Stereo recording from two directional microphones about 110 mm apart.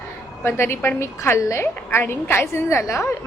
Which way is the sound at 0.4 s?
20° left (ahead or behind).